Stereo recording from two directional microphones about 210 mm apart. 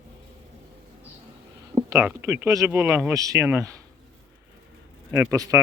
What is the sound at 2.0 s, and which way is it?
Speech, 10° right (ahead or behind).